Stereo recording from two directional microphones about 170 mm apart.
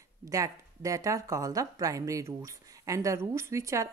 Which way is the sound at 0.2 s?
20° right (ahead or behind).